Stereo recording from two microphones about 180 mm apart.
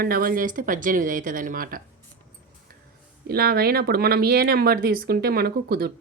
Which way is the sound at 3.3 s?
60° right (ahead or behind).